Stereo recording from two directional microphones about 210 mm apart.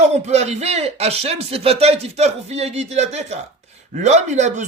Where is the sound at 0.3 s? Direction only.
30° right (ahead or behind).